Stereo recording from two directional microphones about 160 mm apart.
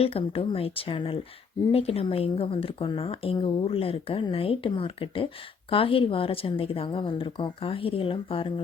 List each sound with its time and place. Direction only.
0.0 s a woman's voice: 35° left (ahead or behind)